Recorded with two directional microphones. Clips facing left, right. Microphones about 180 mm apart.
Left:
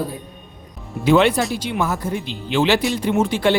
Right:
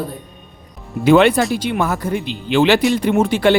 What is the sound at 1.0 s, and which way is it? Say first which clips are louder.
Speech: right 4 dB; 60° right (ahead or behind).